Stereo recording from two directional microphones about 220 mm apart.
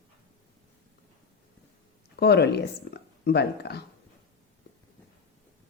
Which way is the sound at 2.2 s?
45° left (ahead or behind).